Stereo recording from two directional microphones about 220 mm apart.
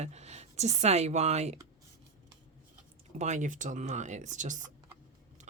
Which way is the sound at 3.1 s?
30° right (ahead or behind).